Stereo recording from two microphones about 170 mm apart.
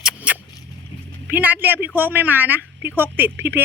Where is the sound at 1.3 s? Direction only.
10° right (ahead or behind).